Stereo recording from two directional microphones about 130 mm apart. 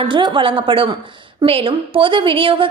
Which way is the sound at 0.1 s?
40° right (ahead or behind).